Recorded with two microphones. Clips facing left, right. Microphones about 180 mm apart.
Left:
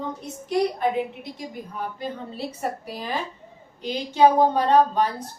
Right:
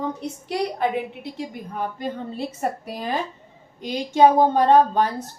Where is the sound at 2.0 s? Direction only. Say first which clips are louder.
Right 3 dB; 45° right (ahead or behind).